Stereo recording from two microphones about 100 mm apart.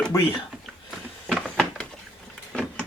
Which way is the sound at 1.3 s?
Centre (ahead or behind).